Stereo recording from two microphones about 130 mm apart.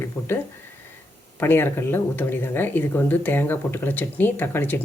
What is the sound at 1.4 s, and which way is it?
Speech, 15° left (ahead or behind).